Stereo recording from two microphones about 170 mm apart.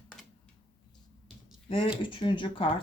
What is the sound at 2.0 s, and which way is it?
Speech, 30° left (ahead or behind).